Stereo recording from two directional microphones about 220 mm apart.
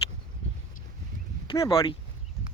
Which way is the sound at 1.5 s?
20° left (ahead or behind).